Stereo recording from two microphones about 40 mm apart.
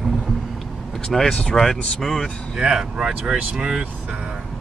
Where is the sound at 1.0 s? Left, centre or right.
Centre.